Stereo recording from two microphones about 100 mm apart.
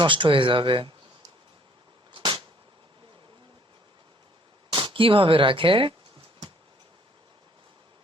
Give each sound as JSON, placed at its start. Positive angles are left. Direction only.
{"t": 0.0, "sound": "speech", "side_deg": -55}
{"t": 2.1, "sound": "a sound", "side_deg": -55}
{"t": 4.7, "sound": "speech", "side_deg": -55}